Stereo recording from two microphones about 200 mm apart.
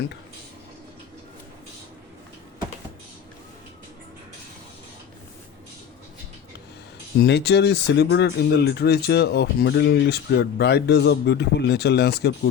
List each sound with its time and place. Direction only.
7.2 s speech: 55° left (ahead or behind)